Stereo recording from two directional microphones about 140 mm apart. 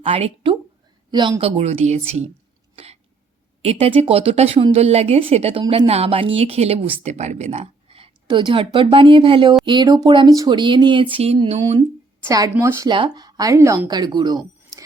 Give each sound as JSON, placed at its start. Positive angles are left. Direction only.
{"t": 0.0, "sound": "speech", "side_deg": -45}
{"t": 1.1, "sound": "speech", "side_deg": -30}
{"t": 1.4, "sound": "speech", "side_deg": -45}
{"t": 2.7, "sound": "throat clearing", "side_deg": -45}
{"t": 3.6, "sound": "speech", "side_deg": -50}
{"t": 12.3, "sound": "a woman's voice", "side_deg": -20}
{"t": 12.9, "sound": "a woman's voice", "side_deg": -30}